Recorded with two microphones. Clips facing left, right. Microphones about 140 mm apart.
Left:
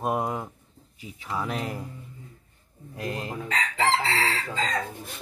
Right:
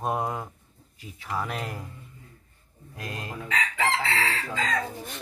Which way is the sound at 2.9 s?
25° left (ahead or behind).